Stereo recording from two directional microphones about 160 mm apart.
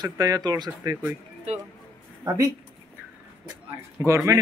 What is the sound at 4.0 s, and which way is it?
Speech, 20° right (ahead or behind).